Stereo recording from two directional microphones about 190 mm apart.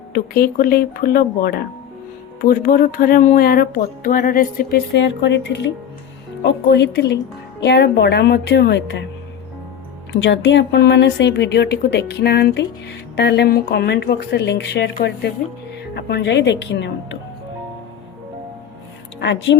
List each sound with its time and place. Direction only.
0.1 s music: 55° left (ahead or behind)
4.9 s a woman's voice: 70° left (ahead or behind)
10.1 s a woman's voice: 70° left (ahead or behind)
19.2 s speech: 70° left (ahead or behind)